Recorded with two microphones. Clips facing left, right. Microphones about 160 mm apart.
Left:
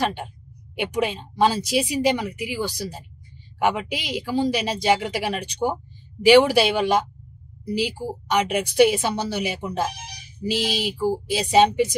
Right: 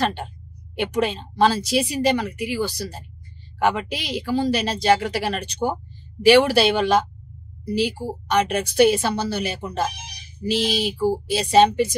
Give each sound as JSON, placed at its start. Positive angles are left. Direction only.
{"t": 0.7, "sound": "speech", "side_deg": 15}